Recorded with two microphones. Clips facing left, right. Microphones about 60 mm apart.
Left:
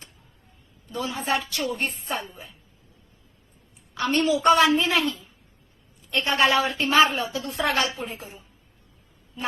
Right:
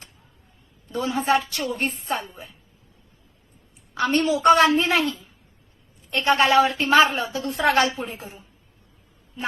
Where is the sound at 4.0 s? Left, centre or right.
Right.